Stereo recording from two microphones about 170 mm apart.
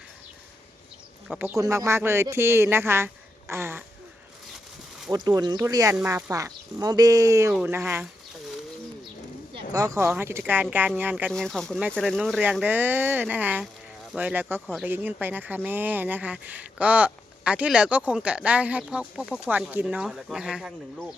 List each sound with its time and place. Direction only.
1.3 s speech: 10° right (ahead or behind)
5.1 s speech: 25° right (ahead or behind)
9.7 s speech: 20° right (ahead or behind)
11.3 s speech: 5° left (ahead or behind)